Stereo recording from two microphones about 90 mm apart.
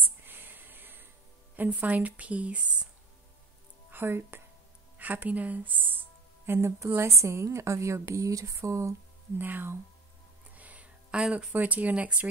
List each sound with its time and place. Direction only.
0.2 s music: 25° right (ahead or behind)
1.6 s speech: 15° right (ahead or behind)
3.9 s a woman's voice: 25° right (ahead or behind)
9.4 s speech: 20° right (ahead or behind)
10.5 s a sound: 15° right (ahead or behind)
11.5 s speech: 15° right (ahead or behind)